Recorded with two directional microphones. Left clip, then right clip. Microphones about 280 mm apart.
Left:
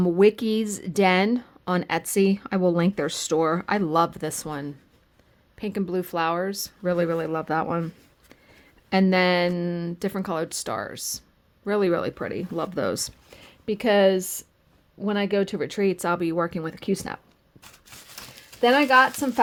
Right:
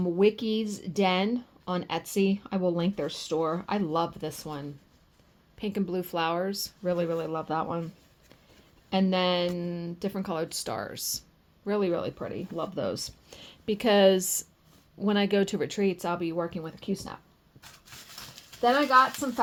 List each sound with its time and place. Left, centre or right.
0.0 s speech: left
8.9 s speech: left
13.3 s a woman's voice: centre; by 17.2 s left
17.9 s a sound: left
18.7 s speech: left